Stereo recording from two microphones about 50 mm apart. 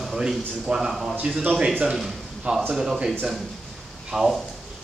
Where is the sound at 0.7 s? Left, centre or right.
Centre.